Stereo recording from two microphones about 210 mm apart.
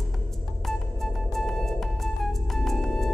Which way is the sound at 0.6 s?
Centre (ahead or behind).